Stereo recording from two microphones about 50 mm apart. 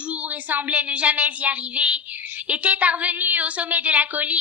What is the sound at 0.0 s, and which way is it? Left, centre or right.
A woman's voice, right.